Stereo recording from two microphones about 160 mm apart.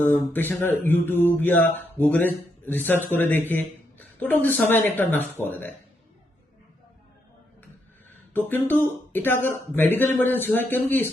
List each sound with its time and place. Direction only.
0.0 s speech: 10° left (ahead or behind)
8.3 s speech: 10° left (ahead or behind)